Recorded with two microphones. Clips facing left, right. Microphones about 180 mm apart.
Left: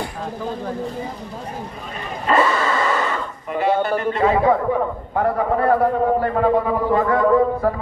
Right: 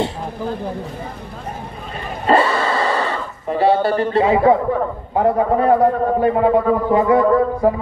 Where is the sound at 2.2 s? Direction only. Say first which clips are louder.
Right 2 dB; 30° right (ahead or behind).